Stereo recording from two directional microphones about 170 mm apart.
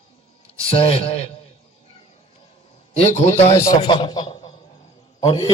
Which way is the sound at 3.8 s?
30° left (ahead or behind).